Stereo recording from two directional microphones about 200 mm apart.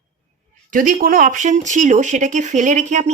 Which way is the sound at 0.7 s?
40° right (ahead or behind).